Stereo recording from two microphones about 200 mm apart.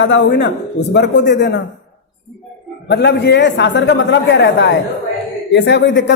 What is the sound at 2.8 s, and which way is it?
A woman's voice, 60° left (ahead or behind).